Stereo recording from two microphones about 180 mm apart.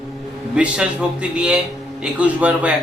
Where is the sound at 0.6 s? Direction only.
5° right (ahead or behind).